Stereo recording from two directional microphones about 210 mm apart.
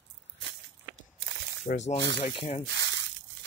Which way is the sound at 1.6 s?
35° left (ahead or behind).